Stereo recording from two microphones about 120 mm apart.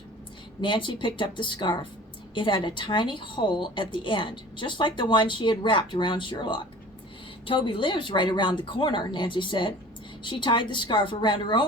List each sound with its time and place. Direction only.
0.6 s a woman's voice: 40° left (ahead or behind)